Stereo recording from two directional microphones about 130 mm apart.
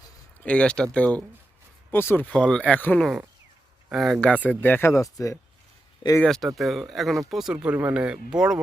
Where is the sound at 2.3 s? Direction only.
5° left (ahead or behind).